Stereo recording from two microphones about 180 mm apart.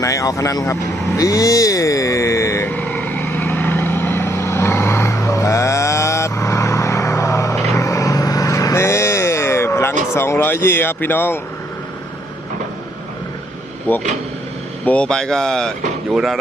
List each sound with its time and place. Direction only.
0.0 s vehicle: 20° left (ahead or behind)
10.2 s speech: 10° left (ahead or behind)
13.9 s speech: 10° left (ahead or behind)